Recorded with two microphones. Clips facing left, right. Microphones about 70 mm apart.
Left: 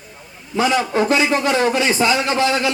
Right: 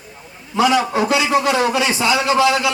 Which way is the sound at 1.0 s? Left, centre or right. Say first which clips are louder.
Right 1 dB; left.